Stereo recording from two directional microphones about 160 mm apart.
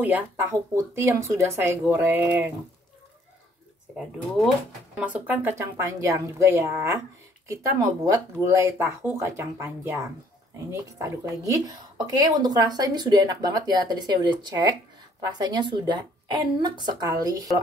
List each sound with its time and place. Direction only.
0.0 s speech: 10° right (ahead or behind)
4.9 s speech: 10° right (ahead or behind)
8.0 s a woman's voice: 20° right (ahead or behind)